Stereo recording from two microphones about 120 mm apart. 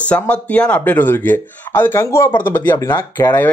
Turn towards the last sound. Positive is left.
turn(degrees=20)  # may be behind; listen again after turning